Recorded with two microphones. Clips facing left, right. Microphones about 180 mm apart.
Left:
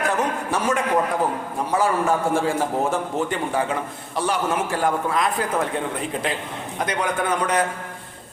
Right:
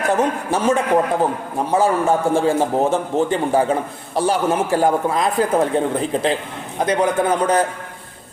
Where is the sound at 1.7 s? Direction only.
25° right (ahead or behind).